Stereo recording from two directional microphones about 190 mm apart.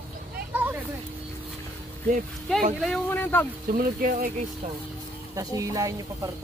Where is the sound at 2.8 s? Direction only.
5° left (ahead or behind).